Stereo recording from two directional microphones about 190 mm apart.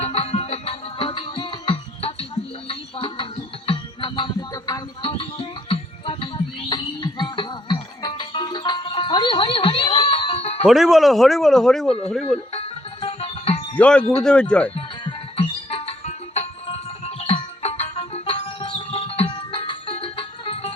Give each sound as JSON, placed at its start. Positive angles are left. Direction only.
{"t": 0.0, "sound": "music", "side_deg": 30}
{"t": 10.7, "sound": "speech", "side_deg": 0}
{"t": 12.5, "sound": "music", "side_deg": 30}
{"t": 13.7, "sound": "speech", "side_deg": 5}
{"t": 14.8, "sound": "music", "side_deg": 30}